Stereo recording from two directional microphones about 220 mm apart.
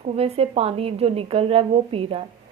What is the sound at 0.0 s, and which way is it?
A woman's voice, 25° right (ahead or behind).